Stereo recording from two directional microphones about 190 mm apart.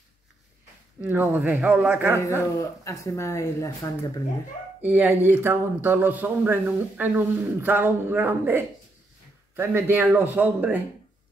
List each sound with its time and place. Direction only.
1.0 s speech: 10° right (ahead or behind)
2.5 s speech: 15° left (ahead or behind)
4.8 s speech: 10° right (ahead or behind)